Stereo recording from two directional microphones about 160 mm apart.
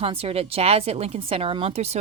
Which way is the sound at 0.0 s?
35° right (ahead or behind).